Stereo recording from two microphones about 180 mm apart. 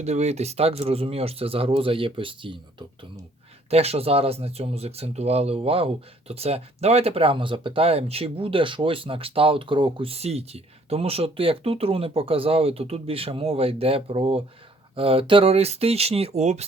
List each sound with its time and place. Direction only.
0.0 s speech: 40° right (ahead or behind)